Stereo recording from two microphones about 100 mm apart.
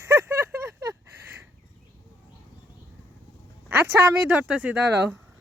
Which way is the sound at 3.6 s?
20° right (ahead or behind).